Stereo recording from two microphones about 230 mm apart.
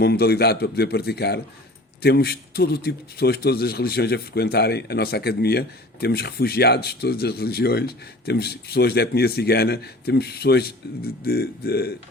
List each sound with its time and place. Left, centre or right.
0.0 s a man's voice: left